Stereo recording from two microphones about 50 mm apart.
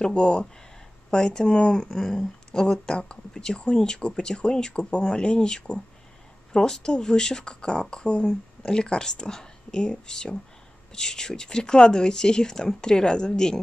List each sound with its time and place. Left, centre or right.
0.0 s speech: left